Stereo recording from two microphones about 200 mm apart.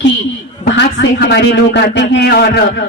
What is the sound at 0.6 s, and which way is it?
A man's voice, 60° left (ahead or behind).